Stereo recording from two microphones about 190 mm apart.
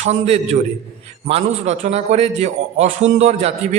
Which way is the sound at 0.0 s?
35° right (ahead or behind).